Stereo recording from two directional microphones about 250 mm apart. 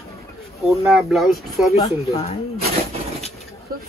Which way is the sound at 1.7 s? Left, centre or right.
Left.